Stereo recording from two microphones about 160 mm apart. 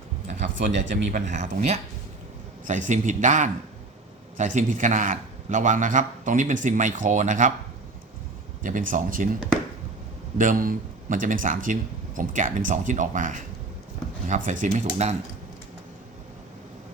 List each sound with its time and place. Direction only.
0.3 s a man's voice: 50° right (ahead or behind)
8.6 s speech: 55° right (ahead or behind)
10.3 s a man's voice: 55° right (ahead or behind)